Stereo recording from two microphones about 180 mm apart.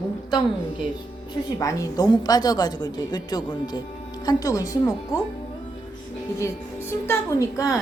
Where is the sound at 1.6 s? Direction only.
20° left (ahead or behind).